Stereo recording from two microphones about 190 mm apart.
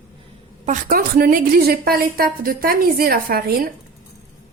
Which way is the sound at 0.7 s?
50° right (ahead or behind).